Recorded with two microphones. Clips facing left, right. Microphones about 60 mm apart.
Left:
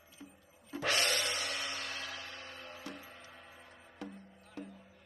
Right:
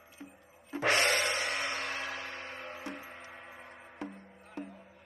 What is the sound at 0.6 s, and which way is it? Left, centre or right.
Music, right.